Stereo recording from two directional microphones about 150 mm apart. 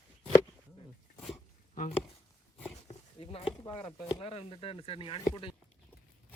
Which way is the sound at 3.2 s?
40° left (ahead or behind).